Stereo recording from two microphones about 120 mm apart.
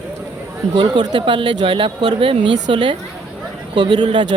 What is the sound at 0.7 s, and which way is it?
Speech, 40° right (ahead or behind).